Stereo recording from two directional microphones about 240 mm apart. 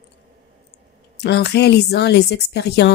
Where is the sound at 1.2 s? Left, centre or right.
Left.